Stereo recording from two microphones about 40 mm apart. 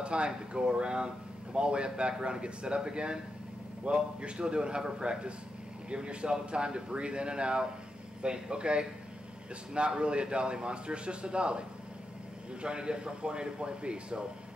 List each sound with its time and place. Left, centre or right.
0.0 s speech: right
12.6 s speech: right